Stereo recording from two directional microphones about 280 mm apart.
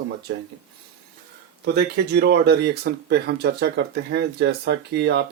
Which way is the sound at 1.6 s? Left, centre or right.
Right.